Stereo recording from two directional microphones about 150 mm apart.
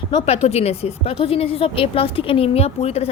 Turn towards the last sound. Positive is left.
turn(degrees=45)  # may be behind; listen again after turning